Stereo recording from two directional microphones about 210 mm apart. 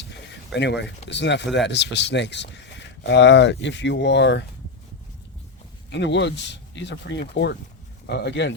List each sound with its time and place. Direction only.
0.0 s speech: 55° left (ahead or behind)
5.9 s speech: 55° left (ahead or behind)